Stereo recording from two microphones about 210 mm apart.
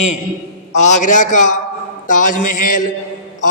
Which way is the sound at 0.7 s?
35° left (ahead or behind).